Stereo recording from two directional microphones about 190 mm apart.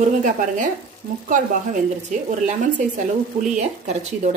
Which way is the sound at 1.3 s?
40° right (ahead or behind).